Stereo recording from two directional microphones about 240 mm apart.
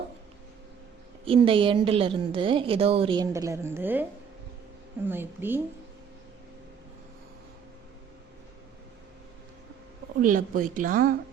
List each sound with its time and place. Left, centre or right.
1.2 s a woman's voice: right
5.0 s a woman's voice: centre
10.2 s speech: right